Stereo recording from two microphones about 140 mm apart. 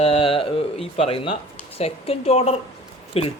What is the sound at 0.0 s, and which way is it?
Speech, 40° left (ahead or behind).